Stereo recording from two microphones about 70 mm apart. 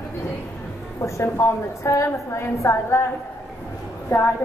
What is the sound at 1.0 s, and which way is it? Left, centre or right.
A woman's voice, left.